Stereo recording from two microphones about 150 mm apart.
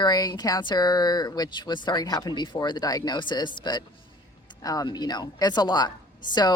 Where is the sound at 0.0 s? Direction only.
25° left (ahead or behind).